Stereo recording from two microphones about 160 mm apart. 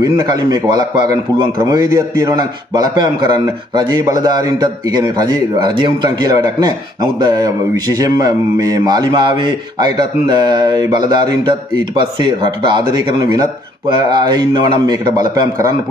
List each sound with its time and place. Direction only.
0.0 s a man's voice: 25° right (ahead or behind)